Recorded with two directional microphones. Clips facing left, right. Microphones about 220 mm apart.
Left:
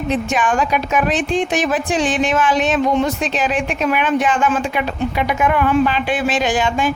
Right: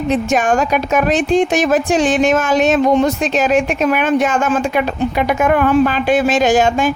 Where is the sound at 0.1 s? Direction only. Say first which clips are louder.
Right 4 dB; 45° right (ahead or behind).